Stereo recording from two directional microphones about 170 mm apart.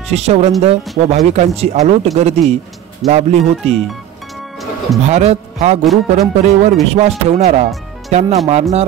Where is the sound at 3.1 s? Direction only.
40° right (ahead or behind).